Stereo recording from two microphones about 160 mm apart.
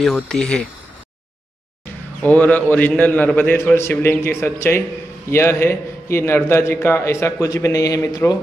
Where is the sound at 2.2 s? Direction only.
10° left (ahead or behind).